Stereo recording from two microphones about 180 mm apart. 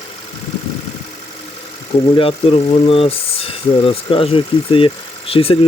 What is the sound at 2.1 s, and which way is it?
Speech, 30° left (ahead or behind).